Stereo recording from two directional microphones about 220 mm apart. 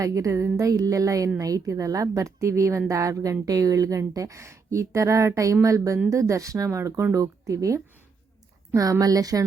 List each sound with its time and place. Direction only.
0.0 s a woman's voice: 15° right (ahead or behind)